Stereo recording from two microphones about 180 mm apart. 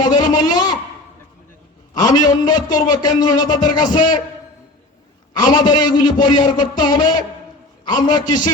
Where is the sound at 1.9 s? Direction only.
25° left (ahead or behind).